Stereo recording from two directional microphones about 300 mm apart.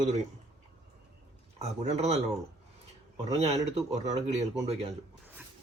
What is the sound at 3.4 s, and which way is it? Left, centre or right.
Speech, right.